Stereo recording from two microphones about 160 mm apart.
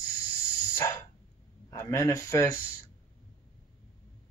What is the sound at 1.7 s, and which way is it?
Speech, 20° left (ahead or behind).